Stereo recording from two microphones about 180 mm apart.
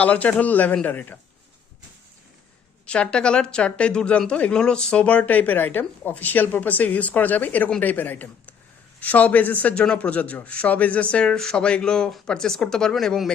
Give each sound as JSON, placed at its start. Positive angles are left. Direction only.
{"t": 0.0, "sound": "speech", "side_deg": 10}
{"t": 2.8, "sound": "speech", "side_deg": 5}